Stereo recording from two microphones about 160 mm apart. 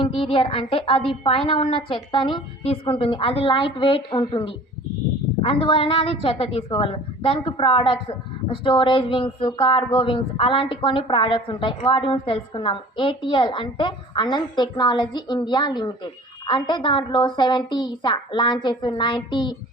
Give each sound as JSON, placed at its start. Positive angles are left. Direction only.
{"t": 0.0, "sound": "a woman's voice", "side_deg": 35}